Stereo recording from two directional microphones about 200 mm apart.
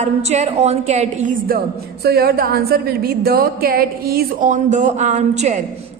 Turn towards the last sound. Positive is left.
turn(degrees=-35)  # may be behind; listen again after turning